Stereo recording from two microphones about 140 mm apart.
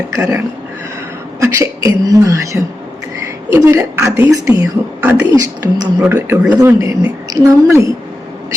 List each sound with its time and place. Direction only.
0.1 s a woman's voice: 20° right (ahead or behind)